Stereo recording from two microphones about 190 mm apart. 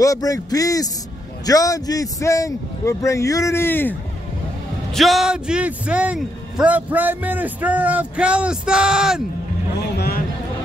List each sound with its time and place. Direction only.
0.0 s a man's voice: 20° left (ahead or behind)
4.9 s a man's voice: centre (ahead or behind)
9.9 s a sound: 55° left (ahead or behind)